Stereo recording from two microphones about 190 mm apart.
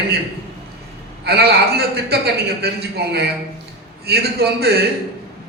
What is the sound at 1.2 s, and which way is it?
A man's voice, 55° right (ahead or behind).